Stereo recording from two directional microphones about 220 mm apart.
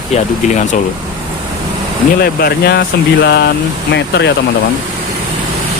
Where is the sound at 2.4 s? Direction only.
50° left (ahead or behind).